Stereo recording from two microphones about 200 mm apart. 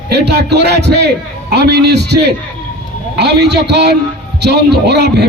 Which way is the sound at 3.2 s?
55° right (ahead or behind).